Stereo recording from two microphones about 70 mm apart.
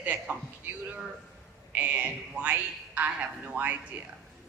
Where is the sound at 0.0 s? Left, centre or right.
Right.